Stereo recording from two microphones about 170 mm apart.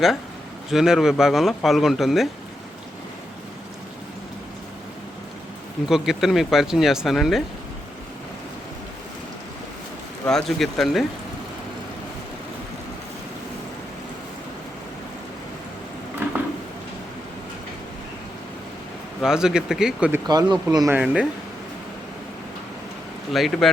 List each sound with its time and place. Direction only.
0.7 s speech: centre (ahead or behind)
5.9 s speech: centre (ahead or behind)
10.2 s speech: centre (ahead or behind)
19.2 s speech: 5° right (ahead or behind)
20.2 s speech: 25° right (ahead or behind)
21.0 s speech: 5° right (ahead or behind)
23.3 s speech: centre (ahead or behind)